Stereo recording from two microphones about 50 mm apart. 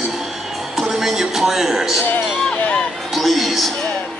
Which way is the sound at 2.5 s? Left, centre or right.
Left.